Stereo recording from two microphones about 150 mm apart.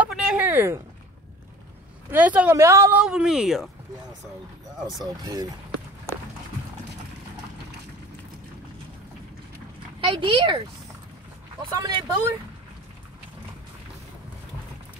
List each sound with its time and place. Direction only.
0.0 s a sound: 5° right (ahead or behind)
0.5 s a sound: 15° right (ahead or behind)
2.0 s speech: 10° right (ahead or behind)
3.0 s speech: 5° right (ahead or behind)
5.0 s speech: 25° right (ahead or behind)
9.9 s speech: 35° right (ahead or behind)
11.7 s speech: 25° right (ahead or behind)